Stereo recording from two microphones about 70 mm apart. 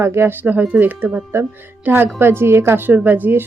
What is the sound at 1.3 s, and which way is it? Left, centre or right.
A woman's voice, right.